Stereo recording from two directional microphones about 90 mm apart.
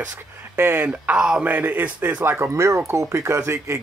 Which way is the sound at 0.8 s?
10° right (ahead or behind).